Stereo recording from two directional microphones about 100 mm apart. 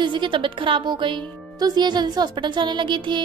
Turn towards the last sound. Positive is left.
turn(degrees=-50)  # may be behind; listen again after turning